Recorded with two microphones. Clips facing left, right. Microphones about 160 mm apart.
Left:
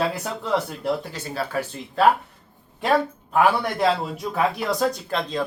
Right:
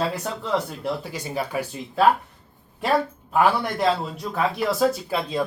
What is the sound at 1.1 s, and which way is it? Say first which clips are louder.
A man's voice: even; 15° right (ahead or behind).